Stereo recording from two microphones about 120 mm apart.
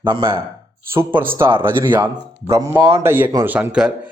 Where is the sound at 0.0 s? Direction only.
45° right (ahead or behind).